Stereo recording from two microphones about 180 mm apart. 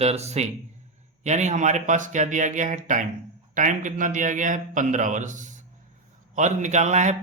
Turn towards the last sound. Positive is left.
turn(degrees=-40)  # may be behind; listen again after turning